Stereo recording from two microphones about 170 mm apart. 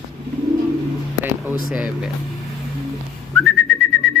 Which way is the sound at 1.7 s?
5° right (ahead or behind).